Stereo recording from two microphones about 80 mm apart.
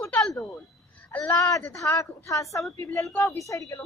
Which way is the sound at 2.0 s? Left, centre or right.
Left.